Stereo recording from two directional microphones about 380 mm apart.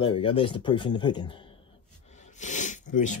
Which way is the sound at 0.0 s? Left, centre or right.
Centre.